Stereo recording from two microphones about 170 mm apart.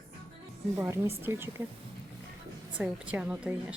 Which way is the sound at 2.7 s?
5° right (ahead or behind).